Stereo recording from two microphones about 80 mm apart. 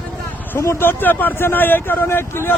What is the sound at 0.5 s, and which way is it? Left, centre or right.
Speech, left.